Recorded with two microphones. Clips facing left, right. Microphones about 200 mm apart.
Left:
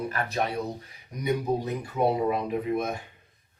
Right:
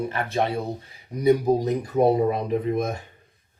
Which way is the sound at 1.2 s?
35° right (ahead or behind).